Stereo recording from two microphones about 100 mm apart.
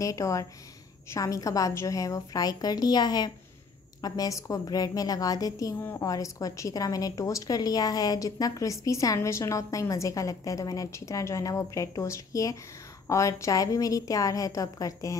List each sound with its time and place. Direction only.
0.0 s a woman's voice: 35° left (ahead or behind)
5.8 s a woman's voice: 20° left (ahead or behind)
6.0 s a woman's voice: 35° left (ahead or behind)